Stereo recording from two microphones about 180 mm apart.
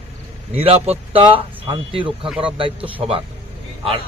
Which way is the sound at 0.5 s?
35° right (ahead or behind).